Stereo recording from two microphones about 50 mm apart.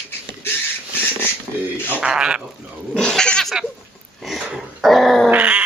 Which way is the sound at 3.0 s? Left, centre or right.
Centre.